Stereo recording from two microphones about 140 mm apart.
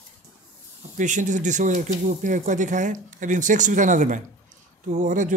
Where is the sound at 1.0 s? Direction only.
60° right (ahead or behind).